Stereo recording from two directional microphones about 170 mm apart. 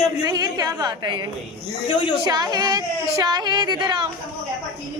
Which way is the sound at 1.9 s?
30° left (ahead or behind).